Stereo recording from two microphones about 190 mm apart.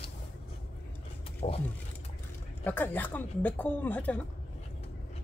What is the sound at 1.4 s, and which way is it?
Speech, 35° left (ahead or behind).